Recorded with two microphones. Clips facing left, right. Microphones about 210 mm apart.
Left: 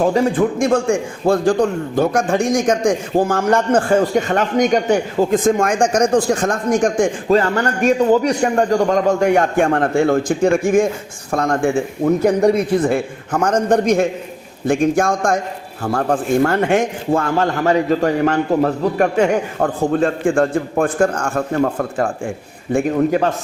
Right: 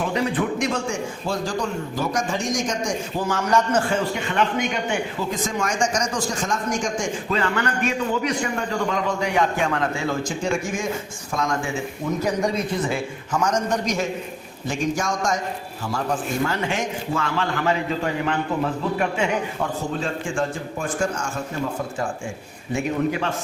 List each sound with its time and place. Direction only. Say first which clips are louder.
0.0 s a man's voice: left 8 dB; 45° left (ahead or behind); by 22.1 s 60° left (ahead or behind)